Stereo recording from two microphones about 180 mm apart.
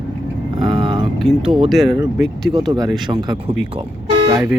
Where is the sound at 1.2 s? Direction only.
Centre (ahead or behind).